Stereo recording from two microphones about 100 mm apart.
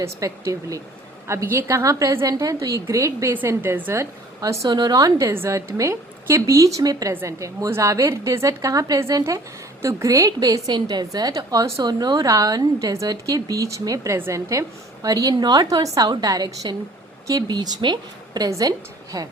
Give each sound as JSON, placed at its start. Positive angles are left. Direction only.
{"t": 0.0, "sound": "a woman's voice", "side_deg": -30}
{"t": 15.0, "sound": "a woman's voice", "side_deg": -40}